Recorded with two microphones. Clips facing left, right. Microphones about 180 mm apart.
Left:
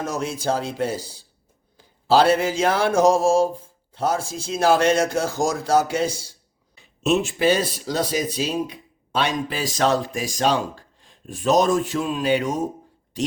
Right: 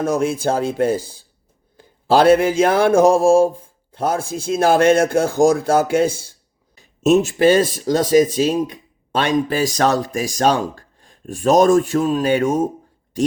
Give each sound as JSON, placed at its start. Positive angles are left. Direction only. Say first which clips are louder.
{"t": 0.0, "sound": "speech", "louder": "right 7 dB", "side_deg": -55}
{"t": 6.7, "sound": "speech", "louder": "right 6 dB", "side_deg": -40}